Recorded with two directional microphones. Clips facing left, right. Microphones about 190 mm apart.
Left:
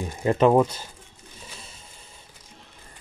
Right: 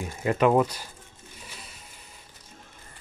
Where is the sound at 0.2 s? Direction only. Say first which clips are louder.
Left 3 dB; 30° left (ahead or behind).